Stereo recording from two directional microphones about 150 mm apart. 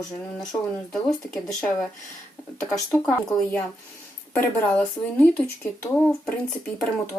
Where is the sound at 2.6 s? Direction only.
5° left (ahead or behind).